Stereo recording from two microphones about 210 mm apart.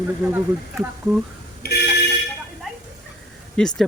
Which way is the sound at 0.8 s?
Centre (ahead or behind).